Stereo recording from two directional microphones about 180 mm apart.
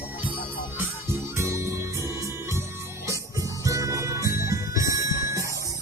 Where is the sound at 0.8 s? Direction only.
15° right (ahead or behind).